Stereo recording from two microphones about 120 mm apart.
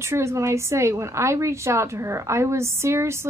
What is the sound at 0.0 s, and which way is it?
A woman's voice, 25° right (ahead or behind).